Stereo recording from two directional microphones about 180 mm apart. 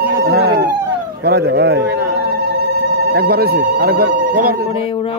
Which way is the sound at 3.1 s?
60° right (ahead or behind).